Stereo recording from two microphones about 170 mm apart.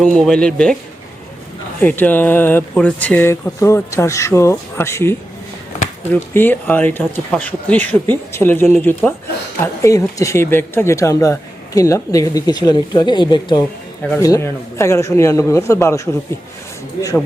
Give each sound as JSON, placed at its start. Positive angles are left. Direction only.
{"t": 0.2, "sound": "speech", "side_deg": 5}
{"t": 1.8, "sound": "speech", "side_deg": 10}